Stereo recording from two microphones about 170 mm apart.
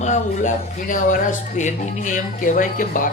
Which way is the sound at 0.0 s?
45° left (ahead or behind).